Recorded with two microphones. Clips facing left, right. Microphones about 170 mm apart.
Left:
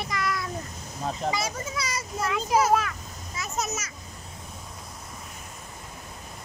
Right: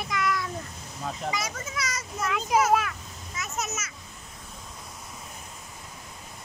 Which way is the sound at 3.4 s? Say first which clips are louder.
Left 2 dB; 35° left (ahead or behind).